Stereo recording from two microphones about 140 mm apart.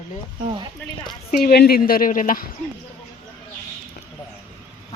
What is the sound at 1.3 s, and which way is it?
A woman's voice, 90° left.